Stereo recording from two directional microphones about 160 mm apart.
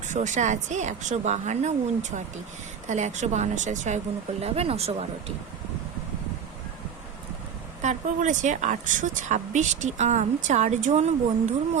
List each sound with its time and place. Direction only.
0.1 s speech: 50° right (ahead or behind)
7.8 s speech: 50° right (ahead or behind)